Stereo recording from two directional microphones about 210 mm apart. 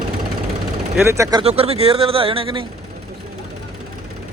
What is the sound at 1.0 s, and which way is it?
Speech, 15° right (ahead or behind).